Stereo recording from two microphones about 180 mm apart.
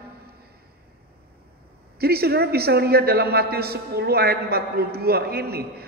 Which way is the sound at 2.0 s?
60° right (ahead or behind).